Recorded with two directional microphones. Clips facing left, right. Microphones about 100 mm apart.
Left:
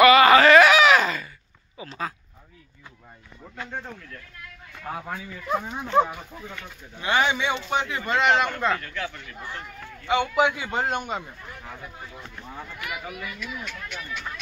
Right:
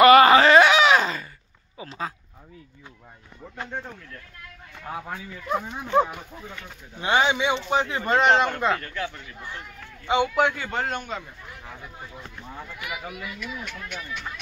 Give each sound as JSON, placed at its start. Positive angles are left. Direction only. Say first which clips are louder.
{"t": 0.0, "sound": "a sound", "louder": "right 2 dB", "side_deg": -40}
{"t": 0.3, "sound": "a sound", "louder": "left 1 dB", "side_deg": -25}
{"t": 1.9, "sound": "speech", "louder": "even", "side_deg": -20}
{"t": 4.9, "sound": "speech", "louder": "right 1 dB", "side_deg": -5}
{"t": 7.0, "sound": "speech", "louder": "right 1 dB", "side_deg": -25}
{"t": 7.7, "sound": "speech", "louder": "right 3 dB", "side_deg": -30}
{"t": 8.5, "sound": "speech", "louder": "right 1 dB", "side_deg": -15}
{"t": 10.2, "sound": "a man's voice", "louder": "even", "side_deg": 5}
{"t": 11.6, "sound": "speech", "louder": "even", "side_deg": -5}
{"t": 12.7, "sound": "speech", "louder": "even", "side_deg": -10}